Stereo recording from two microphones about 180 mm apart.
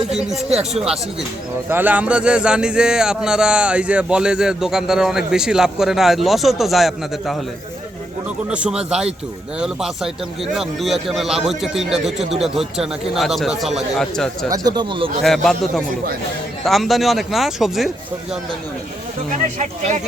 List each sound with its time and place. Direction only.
0.1 s a man's voice: centre (ahead or behind)
8.4 s a man's voice: 5° right (ahead or behind)
14.5 s speech: 20° right (ahead or behind)
15.2 s a man's voice: centre (ahead or behind)